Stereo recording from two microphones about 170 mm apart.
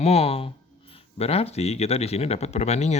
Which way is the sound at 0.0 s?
35° left (ahead or behind).